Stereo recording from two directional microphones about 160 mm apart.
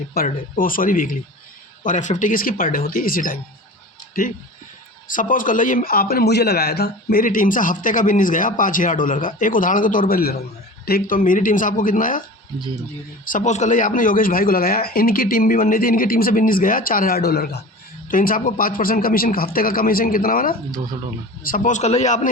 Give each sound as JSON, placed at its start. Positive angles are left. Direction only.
{"t": 0.1, "sound": "speech", "side_deg": 70}
{"t": 0.5, "sound": "a man's voice", "side_deg": 60}
{"t": 5.0, "sound": "a man's voice", "side_deg": 55}
{"t": 13.2, "sound": "a man's voice", "side_deg": 50}
{"t": 18.1, "sound": "a man's voice", "side_deg": 60}